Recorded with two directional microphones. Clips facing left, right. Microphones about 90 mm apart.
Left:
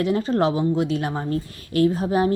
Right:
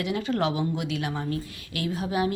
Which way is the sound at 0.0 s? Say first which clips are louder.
Left 6 dB; 35° left (ahead or behind).